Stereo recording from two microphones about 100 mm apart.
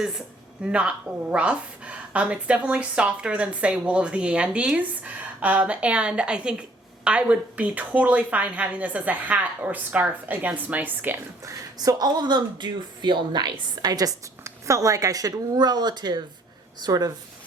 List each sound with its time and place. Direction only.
0.6 s a woman's voice: 10° right (ahead or behind)
11.4 s speech: 35° right (ahead or behind)